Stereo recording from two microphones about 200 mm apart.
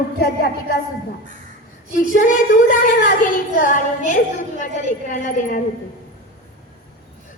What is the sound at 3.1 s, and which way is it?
A woman's voice, 40° left (ahead or behind).